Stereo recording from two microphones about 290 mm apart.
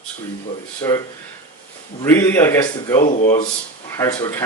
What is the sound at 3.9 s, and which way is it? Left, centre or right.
Speech, centre.